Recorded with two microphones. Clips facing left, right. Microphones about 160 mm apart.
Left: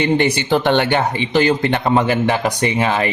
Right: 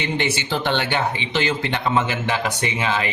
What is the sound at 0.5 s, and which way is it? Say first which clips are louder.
A man's voice: left 8 dB; 55° left (ahead or behind).